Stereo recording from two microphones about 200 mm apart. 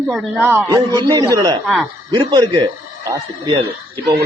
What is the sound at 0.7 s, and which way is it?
Speech, 20° right (ahead or behind).